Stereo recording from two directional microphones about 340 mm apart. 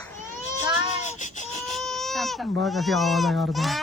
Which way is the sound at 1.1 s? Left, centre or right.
Left.